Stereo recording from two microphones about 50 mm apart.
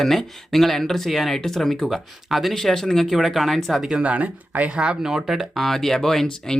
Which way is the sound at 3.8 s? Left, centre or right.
Right.